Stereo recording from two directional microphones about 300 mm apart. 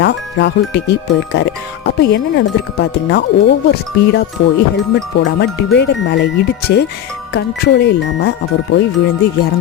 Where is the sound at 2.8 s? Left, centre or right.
Left.